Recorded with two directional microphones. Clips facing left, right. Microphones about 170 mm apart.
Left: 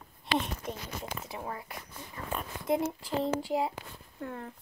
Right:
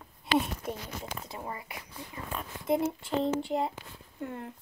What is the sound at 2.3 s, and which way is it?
Speech, centre (ahead or behind).